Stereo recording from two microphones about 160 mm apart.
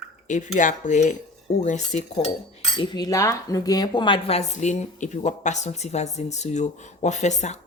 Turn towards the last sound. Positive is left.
turn(degrees=45)  # may be behind; listen again after turning